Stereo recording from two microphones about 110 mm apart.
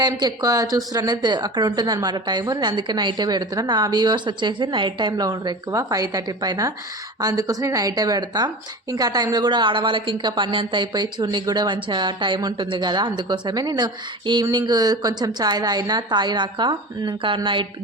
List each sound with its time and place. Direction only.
0.0 s a woman's voice: 40° right (ahead or behind)